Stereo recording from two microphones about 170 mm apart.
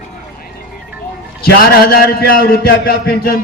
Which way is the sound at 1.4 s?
70° left (ahead or behind).